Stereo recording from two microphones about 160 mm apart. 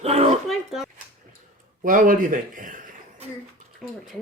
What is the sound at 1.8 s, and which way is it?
Speech, 55° right (ahead or behind).